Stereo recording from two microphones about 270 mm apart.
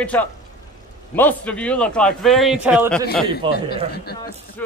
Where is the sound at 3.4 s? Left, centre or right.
Centre.